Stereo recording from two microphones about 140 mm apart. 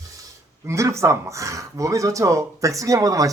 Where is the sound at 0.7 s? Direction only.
20° right (ahead or behind).